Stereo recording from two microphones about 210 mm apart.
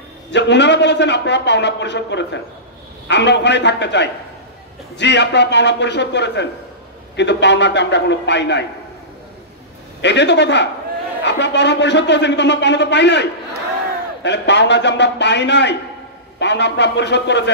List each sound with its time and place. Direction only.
0.3 s a man's voice: 55° left (ahead or behind)
10.0 s a man's voice: 55° left (ahead or behind)